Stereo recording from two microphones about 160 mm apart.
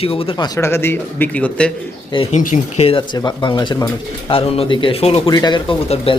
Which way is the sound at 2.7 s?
35° left (ahead or behind).